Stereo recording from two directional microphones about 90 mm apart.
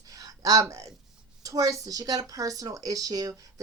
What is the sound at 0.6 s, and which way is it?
A woman's voice, 35° right (ahead or behind).